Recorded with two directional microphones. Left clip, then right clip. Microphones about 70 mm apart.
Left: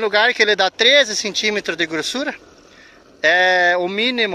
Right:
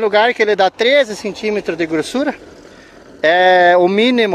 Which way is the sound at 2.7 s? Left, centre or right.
Right.